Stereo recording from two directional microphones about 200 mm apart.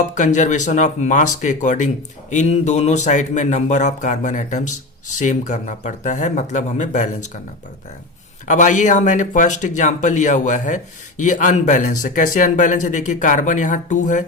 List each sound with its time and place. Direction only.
0.1 s speech: 35° left (ahead or behind)
8.4 s speech: 40° left (ahead or behind)